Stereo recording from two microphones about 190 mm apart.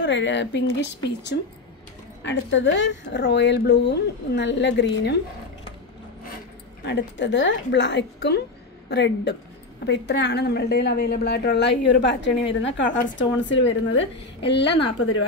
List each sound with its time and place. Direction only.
0.0 s a woman's voice: 70° left (ahead or behind)
6.9 s a woman's voice: 65° left (ahead or behind)